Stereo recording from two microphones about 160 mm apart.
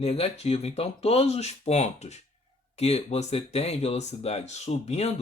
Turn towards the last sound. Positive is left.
turn(degrees=40)  # may be behind; listen again after turning